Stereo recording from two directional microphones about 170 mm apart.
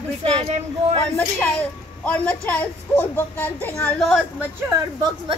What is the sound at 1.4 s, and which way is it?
A child's voice, 10° left (ahead or behind).